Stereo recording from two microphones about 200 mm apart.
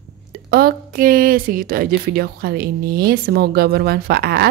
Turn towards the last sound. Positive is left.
turn(degrees=-50)  # may be behind; listen again after turning